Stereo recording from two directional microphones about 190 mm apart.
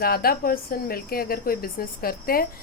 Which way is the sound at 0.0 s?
50° left (ahead or behind).